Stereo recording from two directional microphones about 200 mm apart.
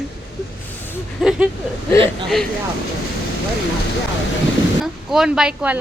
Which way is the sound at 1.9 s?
25° right (ahead or behind).